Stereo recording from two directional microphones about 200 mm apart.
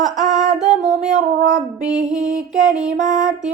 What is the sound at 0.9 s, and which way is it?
Music, 40° right (ahead or behind).